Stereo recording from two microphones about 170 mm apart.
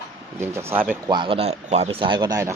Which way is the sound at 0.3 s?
15° right (ahead or behind).